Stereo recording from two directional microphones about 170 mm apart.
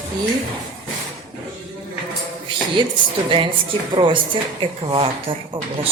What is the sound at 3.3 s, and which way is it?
A woman's voice, 30° right (ahead or behind).